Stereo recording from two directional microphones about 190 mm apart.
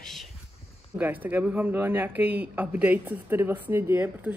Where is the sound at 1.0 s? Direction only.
10° right (ahead or behind).